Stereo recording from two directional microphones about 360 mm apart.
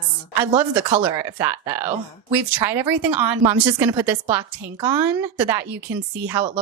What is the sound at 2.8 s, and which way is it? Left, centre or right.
Speech, right.